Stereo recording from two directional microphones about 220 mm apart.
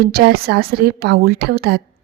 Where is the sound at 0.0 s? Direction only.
45° right (ahead or behind).